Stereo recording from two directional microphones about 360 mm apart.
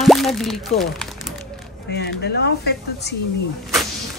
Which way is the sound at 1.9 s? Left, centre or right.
Left.